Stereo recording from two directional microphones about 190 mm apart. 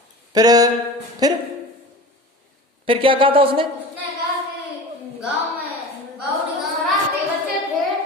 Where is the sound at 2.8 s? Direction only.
25° right (ahead or behind).